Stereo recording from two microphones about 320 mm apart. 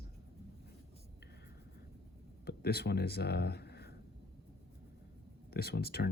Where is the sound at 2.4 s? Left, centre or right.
Left.